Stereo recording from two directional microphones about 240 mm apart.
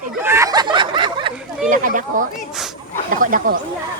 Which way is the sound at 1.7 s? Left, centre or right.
Right.